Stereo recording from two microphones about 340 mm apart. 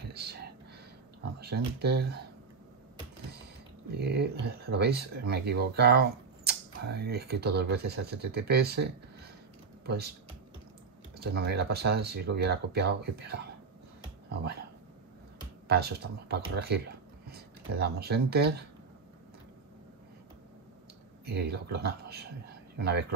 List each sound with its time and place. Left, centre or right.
0.0 s whispering: right
1.4 s speech: right
3.9 s speech: right
11.2 s speech: right
15.7 s speech: right
21.3 s speech: right